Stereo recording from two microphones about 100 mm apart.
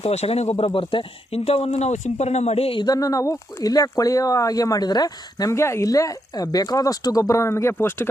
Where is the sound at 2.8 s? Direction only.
35° left (ahead or behind).